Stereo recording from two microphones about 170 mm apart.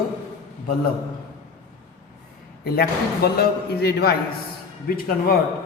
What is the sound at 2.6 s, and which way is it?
A man's voice, 65° left (ahead or behind).